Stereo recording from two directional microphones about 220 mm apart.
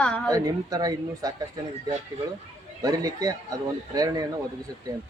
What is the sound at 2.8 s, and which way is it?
Speech, 15° right (ahead or behind).